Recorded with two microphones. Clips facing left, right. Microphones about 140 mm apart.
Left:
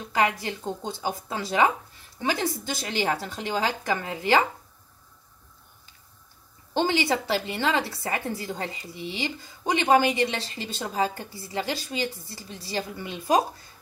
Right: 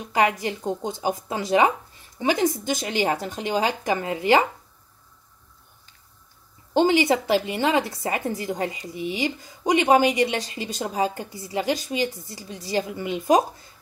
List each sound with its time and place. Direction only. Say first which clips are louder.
0.0 s speech: right 3 dB; 15° right (ahead or behind)
6.7 s speech: right 5 dB; 15° right (ahead or behind)